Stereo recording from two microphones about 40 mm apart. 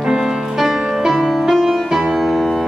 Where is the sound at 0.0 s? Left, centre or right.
Centre.